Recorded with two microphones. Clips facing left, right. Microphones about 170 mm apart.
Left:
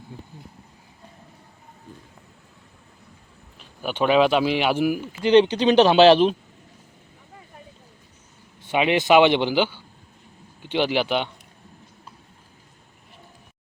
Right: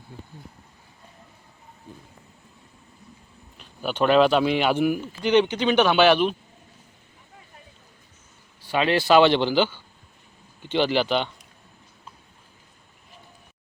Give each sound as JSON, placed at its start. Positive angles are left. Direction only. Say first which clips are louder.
{"t": 3.8, "sound": "speech", "louder": "even", "side_deg": 10}
{"t": 5.7, "sound": "speech", "louder": "left 4 dB", "side_deg": 30}
{"t": 8.6, "sound": "a man's voice", "louder": "left 1 dB", "side_deg": 20}